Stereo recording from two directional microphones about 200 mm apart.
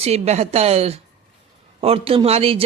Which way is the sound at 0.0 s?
30° right (ahead or behind).